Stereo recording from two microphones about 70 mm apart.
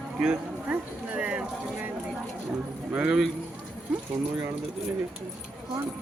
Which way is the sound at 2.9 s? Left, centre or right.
Centre.